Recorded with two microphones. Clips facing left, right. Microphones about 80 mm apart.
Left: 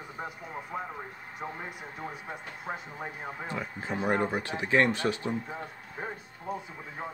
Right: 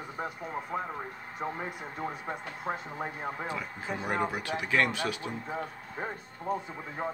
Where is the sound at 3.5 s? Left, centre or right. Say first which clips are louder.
Left 1 dB; left.